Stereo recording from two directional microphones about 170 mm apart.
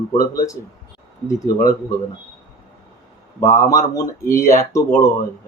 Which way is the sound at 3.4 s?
20° left (ahead or behind).